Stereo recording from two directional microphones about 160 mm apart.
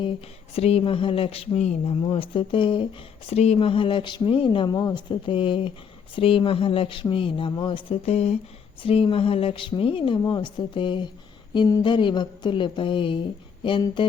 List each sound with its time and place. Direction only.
0.5 s speech: 40° left (ahead or behind)